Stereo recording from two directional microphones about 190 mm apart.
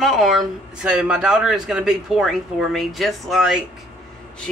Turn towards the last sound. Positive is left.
turn(degrees=-5)  # may be behind; listen again after turning